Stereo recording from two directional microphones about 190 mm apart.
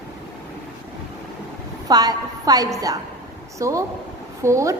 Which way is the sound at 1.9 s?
20° right (ahead or behind).